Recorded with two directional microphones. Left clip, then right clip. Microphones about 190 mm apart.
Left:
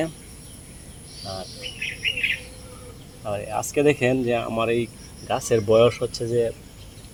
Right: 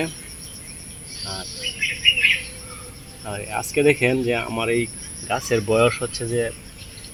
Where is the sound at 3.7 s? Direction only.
35° left (ahead or behind).